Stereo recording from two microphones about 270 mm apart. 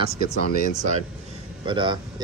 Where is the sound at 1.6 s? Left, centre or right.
Centre.